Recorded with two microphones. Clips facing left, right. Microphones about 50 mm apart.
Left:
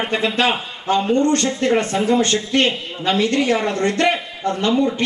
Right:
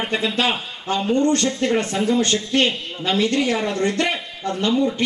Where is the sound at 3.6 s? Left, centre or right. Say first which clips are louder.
Left 3 dB; left.